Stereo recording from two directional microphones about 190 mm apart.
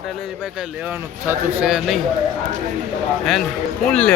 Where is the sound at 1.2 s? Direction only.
10° right (ahead or behind).